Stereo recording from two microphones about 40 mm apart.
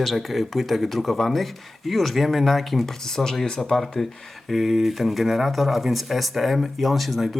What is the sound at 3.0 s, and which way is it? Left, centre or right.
Speech, centre.